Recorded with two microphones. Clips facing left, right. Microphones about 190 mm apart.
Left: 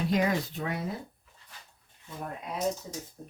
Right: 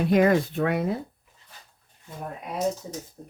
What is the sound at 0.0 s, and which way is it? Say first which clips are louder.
Speech: right 7 dB; 60° right (ahead or behind).